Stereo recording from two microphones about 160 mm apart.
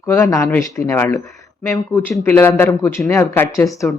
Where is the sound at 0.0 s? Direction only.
20° left (ahead or behind).